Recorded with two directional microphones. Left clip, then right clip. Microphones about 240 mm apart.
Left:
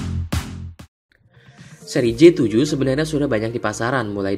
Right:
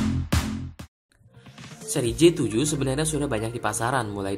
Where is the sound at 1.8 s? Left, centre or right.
Left.